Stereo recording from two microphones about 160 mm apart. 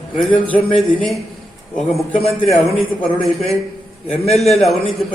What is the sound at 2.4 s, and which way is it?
Speech, centre (ahead or behind).